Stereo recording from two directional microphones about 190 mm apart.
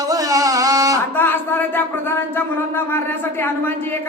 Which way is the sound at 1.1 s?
10° left (ahead or behind).